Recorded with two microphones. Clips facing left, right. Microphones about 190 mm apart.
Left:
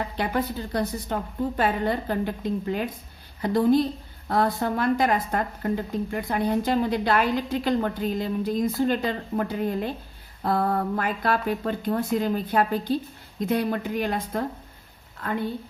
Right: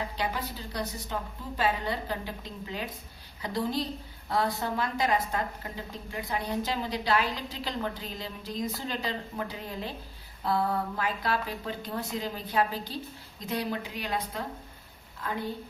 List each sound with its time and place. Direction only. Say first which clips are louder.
0.2 s speech: left 7 dB; 55° left (ahead or behind)